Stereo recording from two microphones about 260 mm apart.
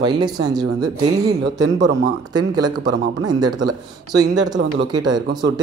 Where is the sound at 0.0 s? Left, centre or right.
Centre.